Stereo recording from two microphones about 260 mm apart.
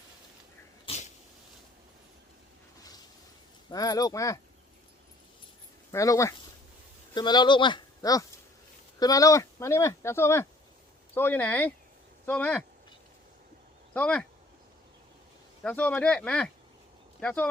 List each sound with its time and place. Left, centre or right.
0.9 s sneeze: left
3.7 s speech: centre
5.9 s speech: centre
13.9 s speech: centre
15.6 s speech: centre